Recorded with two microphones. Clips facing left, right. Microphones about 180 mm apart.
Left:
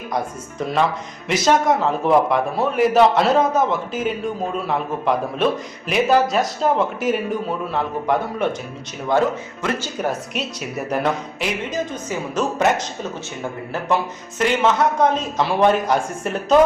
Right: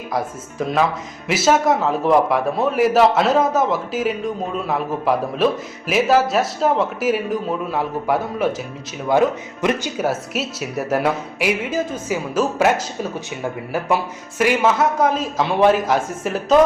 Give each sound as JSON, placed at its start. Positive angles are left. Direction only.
{"t": 0.1, "sound": "a man's voice", "side_deg": 0}